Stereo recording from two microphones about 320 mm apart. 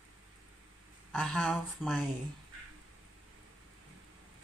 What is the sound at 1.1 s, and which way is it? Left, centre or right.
Speech, centre.